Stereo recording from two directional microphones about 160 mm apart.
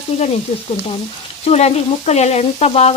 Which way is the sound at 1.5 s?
40° left (ahead or behind).